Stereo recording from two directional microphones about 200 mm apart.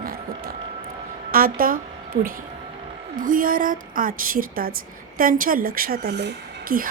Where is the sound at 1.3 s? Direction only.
45° right (ahead or behind).